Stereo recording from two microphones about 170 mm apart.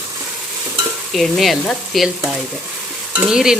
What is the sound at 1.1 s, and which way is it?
Speech, centre (ahead or behind).